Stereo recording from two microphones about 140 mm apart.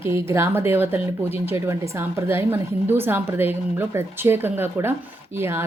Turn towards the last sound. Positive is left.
turn(degrees=-15)  # may be behind; listen again after turning